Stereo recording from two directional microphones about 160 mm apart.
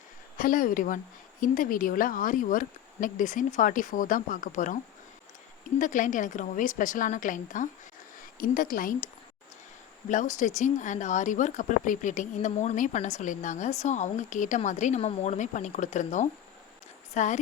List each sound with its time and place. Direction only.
0.3 s speech: 60° left (ahead or behind)
5.8 s a woman's voice: 55° left (ahead or behind)
10.1 s speech: 50° left (ahead or behind)